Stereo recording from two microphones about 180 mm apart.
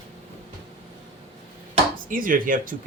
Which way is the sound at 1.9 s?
50° right (ahead or behind).